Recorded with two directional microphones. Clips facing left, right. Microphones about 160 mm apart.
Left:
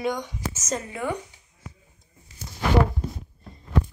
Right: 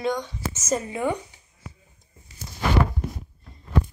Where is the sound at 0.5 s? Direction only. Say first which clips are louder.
Right 5 dB; 5° right (ahead or behind).